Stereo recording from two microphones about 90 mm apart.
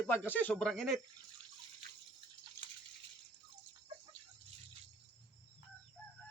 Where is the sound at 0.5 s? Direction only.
5° left (ahead or behind).